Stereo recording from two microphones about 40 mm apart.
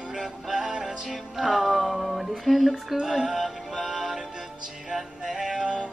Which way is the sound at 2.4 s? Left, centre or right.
Centre.